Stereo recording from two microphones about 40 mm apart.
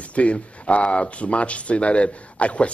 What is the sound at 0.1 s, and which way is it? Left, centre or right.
Speech, left.